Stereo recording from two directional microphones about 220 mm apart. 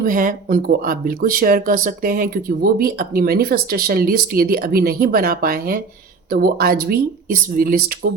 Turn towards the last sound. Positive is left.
turn(degrees=-40)  # may be behind; listen again after turning